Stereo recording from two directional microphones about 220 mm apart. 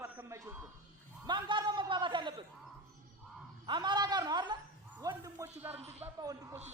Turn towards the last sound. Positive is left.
turn(degrees=-15)  # may be behind; listen again after turning